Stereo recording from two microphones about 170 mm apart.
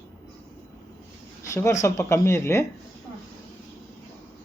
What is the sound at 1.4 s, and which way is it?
Speech, 15° left (ahead or behind).